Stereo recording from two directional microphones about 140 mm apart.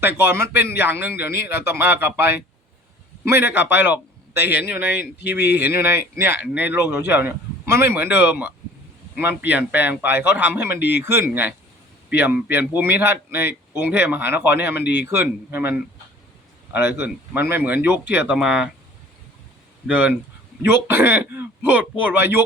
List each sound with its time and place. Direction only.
0.0 s speech: 15° right (ahead or behind)
19.9 s speech: 10° right (ahead or behind)